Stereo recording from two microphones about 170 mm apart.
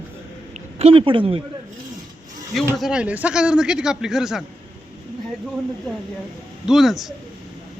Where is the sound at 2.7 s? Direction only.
Centre (ahead or behind).